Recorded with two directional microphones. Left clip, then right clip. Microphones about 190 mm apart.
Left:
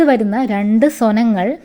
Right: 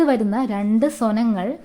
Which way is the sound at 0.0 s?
15° left (ahead or behind).